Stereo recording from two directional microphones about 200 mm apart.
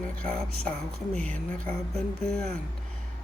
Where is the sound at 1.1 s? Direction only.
5° left (ahead or behind).